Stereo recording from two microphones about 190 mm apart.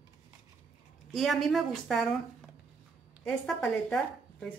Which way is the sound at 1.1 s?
Centre (ahead or behind).